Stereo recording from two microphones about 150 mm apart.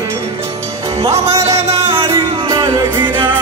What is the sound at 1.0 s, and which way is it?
Music, 20° right (ahead or behind).